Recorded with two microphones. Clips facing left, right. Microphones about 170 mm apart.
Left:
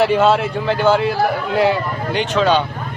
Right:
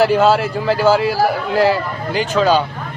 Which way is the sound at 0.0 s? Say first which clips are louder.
Right 1 dB; centre (ahead or behind).